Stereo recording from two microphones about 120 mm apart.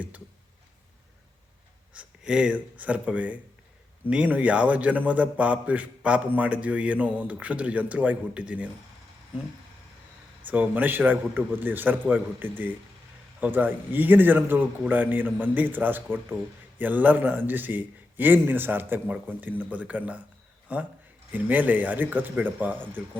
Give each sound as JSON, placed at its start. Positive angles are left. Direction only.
{"t": 1.9, "sound": "a man's voice", "side_deg": -10}
{"t": 10.4, "sound": "a man's voice", "side_deg": -15}